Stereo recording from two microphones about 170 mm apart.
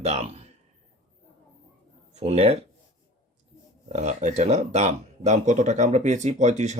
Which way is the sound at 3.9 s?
45° right (ahead or behind).